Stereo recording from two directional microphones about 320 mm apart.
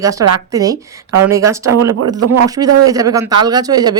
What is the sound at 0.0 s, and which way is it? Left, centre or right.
Speech, centre.